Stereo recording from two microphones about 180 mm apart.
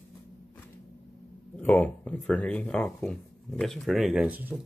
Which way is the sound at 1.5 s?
5° left (ahead or behind).